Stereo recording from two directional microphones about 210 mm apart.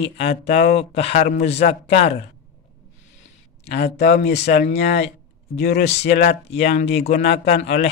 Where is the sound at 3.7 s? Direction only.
50° left (ahead or behind).